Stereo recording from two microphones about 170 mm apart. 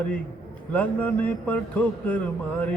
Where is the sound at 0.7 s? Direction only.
10° left (ahead or behind).